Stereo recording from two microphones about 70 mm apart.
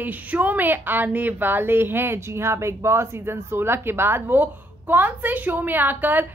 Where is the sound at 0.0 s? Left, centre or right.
Right.